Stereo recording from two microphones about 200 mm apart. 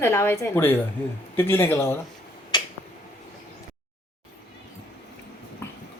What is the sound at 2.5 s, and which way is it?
Finger snapping, 20° left (ahead or behind).